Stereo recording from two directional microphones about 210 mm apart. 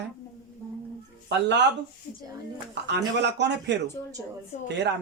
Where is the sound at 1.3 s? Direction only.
55° right (ahead or behind).